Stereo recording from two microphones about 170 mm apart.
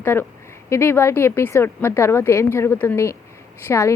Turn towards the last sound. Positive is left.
turn(degrees=15)  # may be behind; listen again after turning